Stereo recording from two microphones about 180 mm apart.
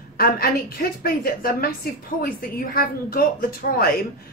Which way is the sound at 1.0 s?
55° left (ahead or behind).